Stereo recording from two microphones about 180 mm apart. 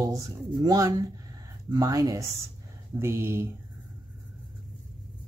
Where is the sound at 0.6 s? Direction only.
20° right (ahead or behind).